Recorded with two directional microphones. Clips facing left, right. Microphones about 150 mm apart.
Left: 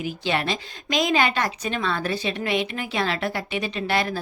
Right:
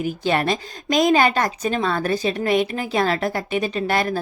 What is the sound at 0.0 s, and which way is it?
Speech, 45° right (ahead or behind).